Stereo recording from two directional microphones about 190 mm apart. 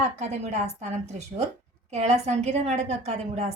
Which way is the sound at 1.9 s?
35° right (ahead or behind).